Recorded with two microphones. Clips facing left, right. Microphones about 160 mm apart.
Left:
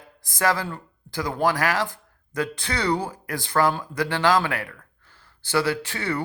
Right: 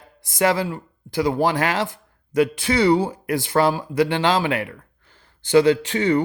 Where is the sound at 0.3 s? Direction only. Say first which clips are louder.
Right 4 dB; 20° right (ahead or behind).